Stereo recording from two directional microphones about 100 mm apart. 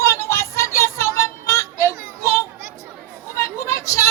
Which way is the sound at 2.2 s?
30° left (ahead or behind).